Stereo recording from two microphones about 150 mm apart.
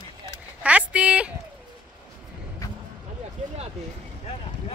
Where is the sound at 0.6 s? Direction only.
10° right (ahead or behind).